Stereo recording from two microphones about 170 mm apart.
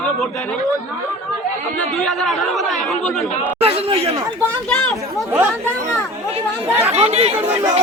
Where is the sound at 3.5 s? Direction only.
35° right (ahead or behind).